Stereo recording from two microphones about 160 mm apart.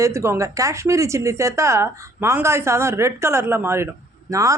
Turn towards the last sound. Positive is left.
turn(degrees=-20)  # may be behind; listen again after turning